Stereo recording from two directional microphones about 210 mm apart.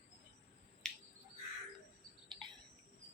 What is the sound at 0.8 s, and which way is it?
Insect, 5° left (ahead or behind).